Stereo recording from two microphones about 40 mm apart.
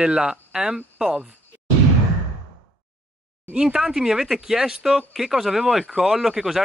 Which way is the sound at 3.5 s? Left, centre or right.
Centre.